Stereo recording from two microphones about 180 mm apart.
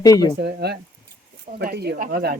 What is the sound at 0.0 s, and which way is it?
Speech, 20° left (ahead or behind).